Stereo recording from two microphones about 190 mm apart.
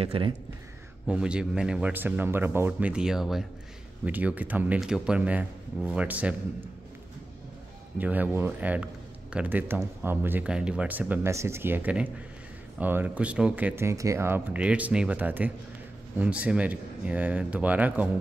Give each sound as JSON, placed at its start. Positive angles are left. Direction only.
{"t": 0.0, "sound": "speech", "side_deg": -30}
{"t": 1.0, "sound": "speech", "side_deg": -5}
{"t": 8.0, "sound": "speech", "side_deg": -10}